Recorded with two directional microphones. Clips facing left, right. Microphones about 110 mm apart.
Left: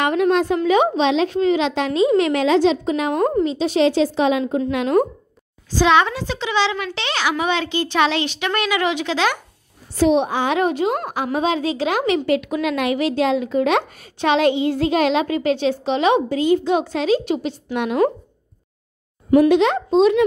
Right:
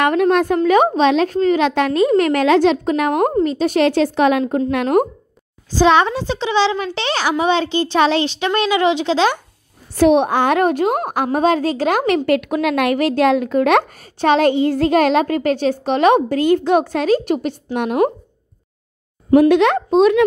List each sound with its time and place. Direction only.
0.0 s a woman's voice: 50° right (ahead or behind)
5.8 s a child's voice: 35° right (ahead or behind)
9.9 s a woman's voice: 60° right (ahead or behind)
19.3 s speech: 50° right (ahead or behind)